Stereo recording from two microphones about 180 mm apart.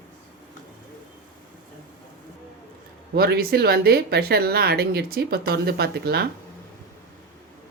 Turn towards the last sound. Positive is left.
turn(degrees=-60)  # may be behind; listen again after turning